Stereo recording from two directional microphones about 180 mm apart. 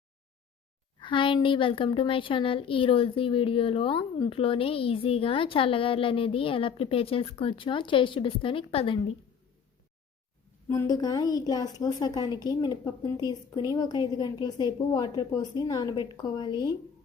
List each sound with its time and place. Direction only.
0.9 s a woman's voice: 25° left (ahead or behind)
10.7 s a woman's voice: 20° left (ahead or behind)